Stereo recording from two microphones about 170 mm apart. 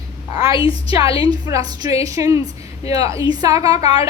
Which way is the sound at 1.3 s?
20° right (ahead or behind).